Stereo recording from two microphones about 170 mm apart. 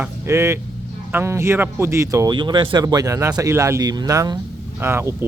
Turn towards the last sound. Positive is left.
turn(degrees=-15)  # may be behind; listen again after turning